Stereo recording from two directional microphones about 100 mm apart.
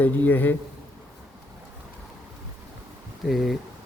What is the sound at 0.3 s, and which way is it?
Speech, 20° left (ahead or behind).